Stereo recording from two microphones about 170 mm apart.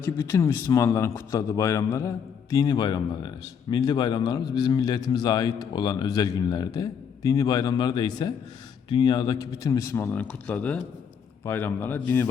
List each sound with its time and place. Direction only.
0.0 s a man's voice: 15° left (ahead or behind)